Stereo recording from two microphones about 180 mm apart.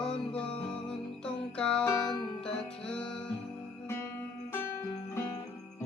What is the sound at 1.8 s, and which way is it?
Music, 20° left (ahead or behind).